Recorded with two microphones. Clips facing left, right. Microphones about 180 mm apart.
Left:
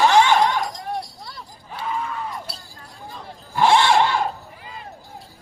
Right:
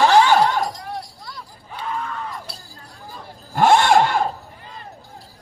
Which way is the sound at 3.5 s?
50° right (ahead or behind).